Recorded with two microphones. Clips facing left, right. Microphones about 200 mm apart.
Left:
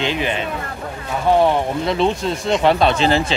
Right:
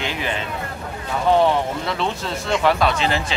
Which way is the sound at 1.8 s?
20° left (ahead or behind).